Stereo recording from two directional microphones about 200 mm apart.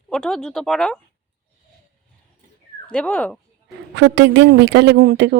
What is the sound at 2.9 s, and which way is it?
Speech, 5° left (ahead or behind).